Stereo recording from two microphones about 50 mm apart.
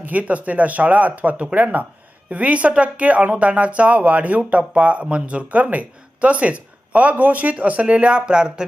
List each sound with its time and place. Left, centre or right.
0.0 s speech: right